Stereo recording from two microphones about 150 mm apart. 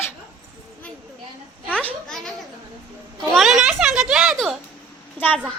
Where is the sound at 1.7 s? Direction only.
10° left (ahead or behind).